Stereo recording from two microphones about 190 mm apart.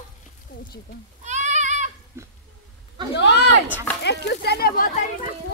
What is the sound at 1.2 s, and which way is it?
Goat, 40° right (ahead or behind).